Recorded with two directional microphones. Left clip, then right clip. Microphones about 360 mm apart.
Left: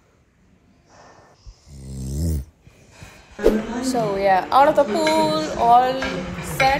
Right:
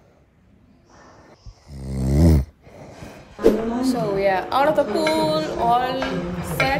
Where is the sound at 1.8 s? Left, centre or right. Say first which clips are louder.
Right 10 dB; centre.